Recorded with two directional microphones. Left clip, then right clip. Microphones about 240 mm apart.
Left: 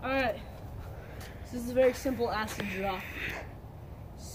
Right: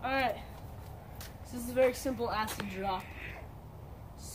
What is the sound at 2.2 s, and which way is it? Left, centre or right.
Speech, centre.